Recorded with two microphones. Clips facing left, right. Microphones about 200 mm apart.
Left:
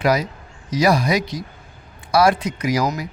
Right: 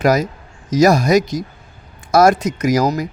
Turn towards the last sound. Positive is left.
turn(degrees=-40)  # may be behind; listen again after turning